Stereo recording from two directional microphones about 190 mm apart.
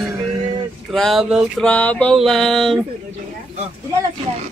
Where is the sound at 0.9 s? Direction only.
Centre (ahead or behind).